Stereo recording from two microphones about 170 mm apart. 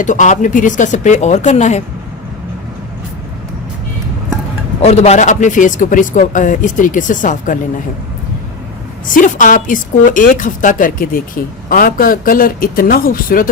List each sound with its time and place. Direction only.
0.0 s a man's voice: 50° left (ahead or behind)
4.8 s a man's voice: 40° left (ahead or behind)
9.0 s a man's voice: 50° left (ahead or behind)